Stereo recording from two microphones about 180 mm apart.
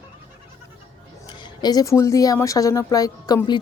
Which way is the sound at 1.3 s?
25° left (ahead or behind).